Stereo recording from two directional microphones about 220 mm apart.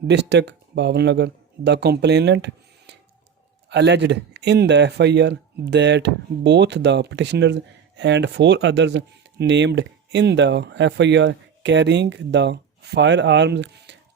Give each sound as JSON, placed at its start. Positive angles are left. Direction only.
{"t": 0.1, "sound": "speech", "side_deg": -50}